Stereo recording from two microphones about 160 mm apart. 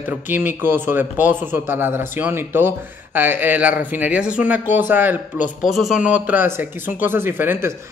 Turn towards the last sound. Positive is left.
turn(degrees=-15)  # may be behind; listen again after turning